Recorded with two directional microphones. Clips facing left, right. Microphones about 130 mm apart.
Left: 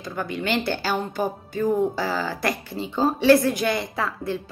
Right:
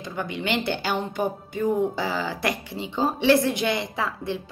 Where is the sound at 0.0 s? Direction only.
20° right (ahead or behind).